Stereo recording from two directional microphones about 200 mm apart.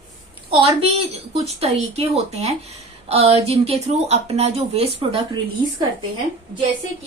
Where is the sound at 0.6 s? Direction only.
30° right (ahead or behind).